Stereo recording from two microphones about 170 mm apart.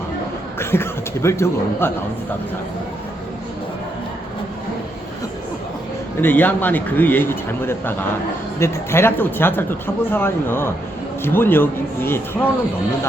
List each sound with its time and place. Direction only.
0.6 s speech: 15° left (ahead or behind)
6.2 s speech: 10° left (ahead or behind)